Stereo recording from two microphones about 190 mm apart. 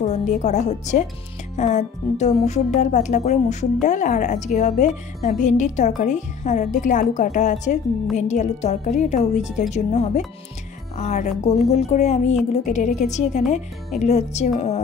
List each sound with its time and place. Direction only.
0.0 s a woman's voice: 40° left (ahead or behind)